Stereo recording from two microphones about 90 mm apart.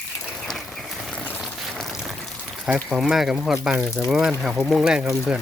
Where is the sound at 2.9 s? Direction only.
5° right (ahead or behind).